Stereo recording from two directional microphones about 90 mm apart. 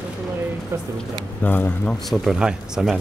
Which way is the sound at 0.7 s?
30° right (ahead or behind).